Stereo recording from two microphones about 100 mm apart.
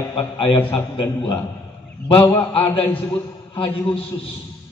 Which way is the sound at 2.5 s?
65° left (ahead or behind).